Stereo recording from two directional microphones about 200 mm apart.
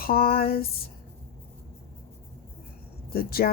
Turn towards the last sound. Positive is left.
turn(degrees=50)  # may be behind; listen again after turning